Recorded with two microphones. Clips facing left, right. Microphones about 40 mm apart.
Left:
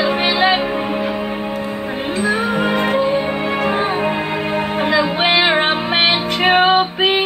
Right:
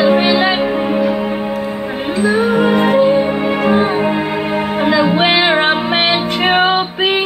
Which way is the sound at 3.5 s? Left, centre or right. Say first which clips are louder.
Right 4 dB; centre.